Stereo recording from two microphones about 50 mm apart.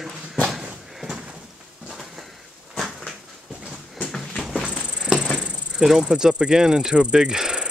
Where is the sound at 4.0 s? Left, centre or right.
Centre.